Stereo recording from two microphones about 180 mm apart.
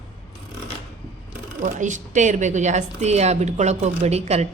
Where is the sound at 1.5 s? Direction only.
45° right (ahead or behind).